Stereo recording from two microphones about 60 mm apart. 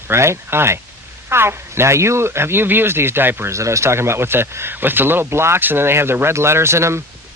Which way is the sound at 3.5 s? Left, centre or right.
Right.